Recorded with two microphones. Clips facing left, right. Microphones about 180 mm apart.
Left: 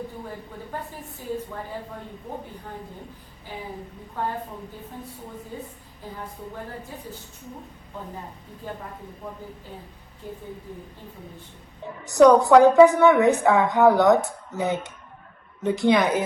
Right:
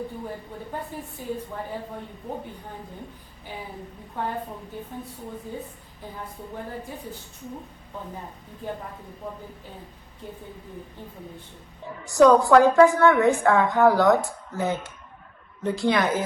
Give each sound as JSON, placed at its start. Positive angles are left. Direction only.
{"t": 12.0, "sound": "a woman's voice", "side_deg": 20}